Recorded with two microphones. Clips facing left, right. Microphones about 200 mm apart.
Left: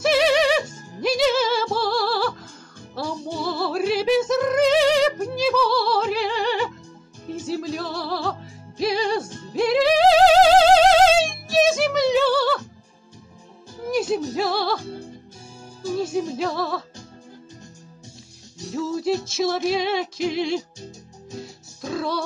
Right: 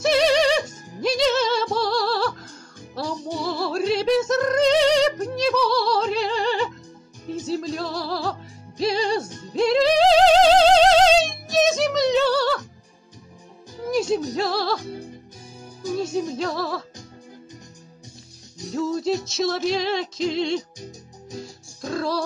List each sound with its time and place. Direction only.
0.0 s music: 5° left (ahead or behind)
3.3 s music: centre (ahead or behind)
13.8 s music: 5° left (ahead or behind)
14.8 s music: 15° right (ahead or behind)
16.3 s music: centre (ahead or behind)
18.7 s music: 5° left (ahead or behind)
21.8 s music: centre (ahead or behind)